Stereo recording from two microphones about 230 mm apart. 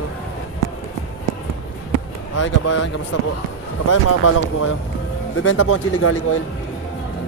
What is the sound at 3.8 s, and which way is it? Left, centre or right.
Speech, left.